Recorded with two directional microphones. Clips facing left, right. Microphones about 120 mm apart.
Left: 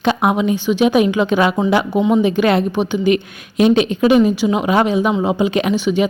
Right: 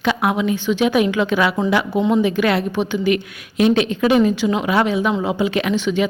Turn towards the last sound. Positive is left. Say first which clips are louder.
# left 3 dB
turn(degrees=15)  # may be behind; listen again after turning